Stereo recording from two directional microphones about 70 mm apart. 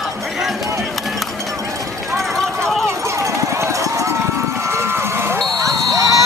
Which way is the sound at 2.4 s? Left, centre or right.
Centre.